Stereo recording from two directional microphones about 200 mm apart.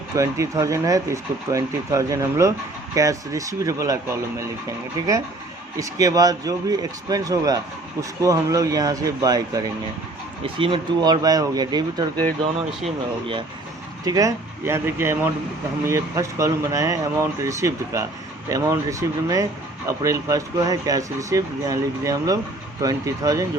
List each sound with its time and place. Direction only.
0.2 s speech: 15° right (ahead or behind)
5.8 s speech: 15° right (ahead or behind)
14.0 s speech: 20° right (ahead or behind)